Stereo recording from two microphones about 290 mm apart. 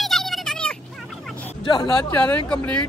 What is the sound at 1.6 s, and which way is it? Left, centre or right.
Speech, centre.